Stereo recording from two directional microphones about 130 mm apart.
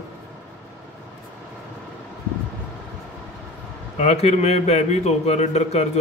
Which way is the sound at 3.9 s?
55° left (ahead or behind).